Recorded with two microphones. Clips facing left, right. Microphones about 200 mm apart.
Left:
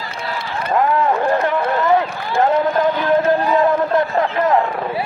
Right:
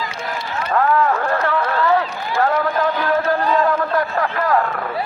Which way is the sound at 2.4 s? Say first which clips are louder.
Left 3 dB; 20° left (ahead or behind).